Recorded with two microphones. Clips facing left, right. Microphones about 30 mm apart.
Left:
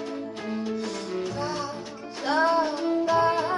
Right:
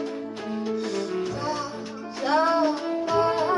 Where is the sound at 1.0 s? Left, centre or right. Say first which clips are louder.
Right 2 dB; centre.